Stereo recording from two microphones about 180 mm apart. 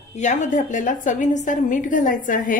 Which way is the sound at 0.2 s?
40° left (ahead or behind).